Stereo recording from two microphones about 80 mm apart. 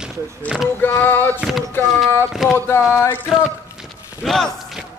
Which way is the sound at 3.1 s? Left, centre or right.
Left.